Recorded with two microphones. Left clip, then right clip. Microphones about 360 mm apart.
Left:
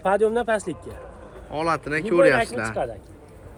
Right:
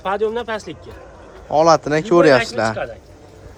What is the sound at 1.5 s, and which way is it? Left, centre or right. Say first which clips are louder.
Speech: right 11 dB; centre.